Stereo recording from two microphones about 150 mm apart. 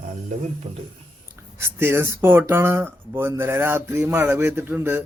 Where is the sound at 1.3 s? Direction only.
15° right (ahead or behind).